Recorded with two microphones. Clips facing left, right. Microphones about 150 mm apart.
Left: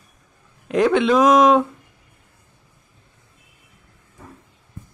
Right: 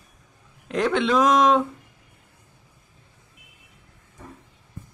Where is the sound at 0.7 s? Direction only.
5° left (ahead or behind).